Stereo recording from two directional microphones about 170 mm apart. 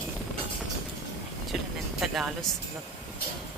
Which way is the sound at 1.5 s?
Centre (ahead or behind).